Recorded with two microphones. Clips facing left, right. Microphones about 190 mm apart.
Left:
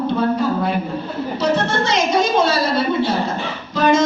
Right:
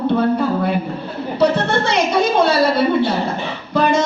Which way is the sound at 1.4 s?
60° right (ahead or behind).